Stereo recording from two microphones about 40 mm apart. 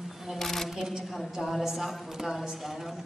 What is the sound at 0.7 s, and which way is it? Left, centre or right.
Speech, centre.